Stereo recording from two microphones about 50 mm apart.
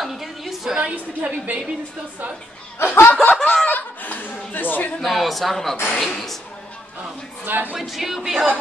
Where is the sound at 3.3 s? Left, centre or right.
Centre.